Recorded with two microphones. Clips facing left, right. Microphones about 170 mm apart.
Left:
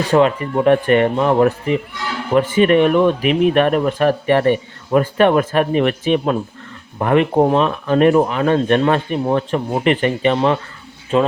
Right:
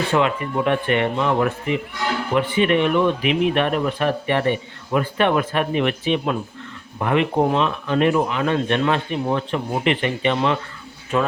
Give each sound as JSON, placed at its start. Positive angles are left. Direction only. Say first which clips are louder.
{"t": 0.1, "sound": "speech", "louder": "left 9 dB", "side_deg": 35}
{"t": 11.1, "sound": "speech", "louder": "left 5 dB", "side_deg": 25}